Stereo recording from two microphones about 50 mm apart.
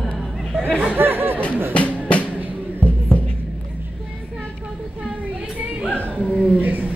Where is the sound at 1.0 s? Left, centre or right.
Right.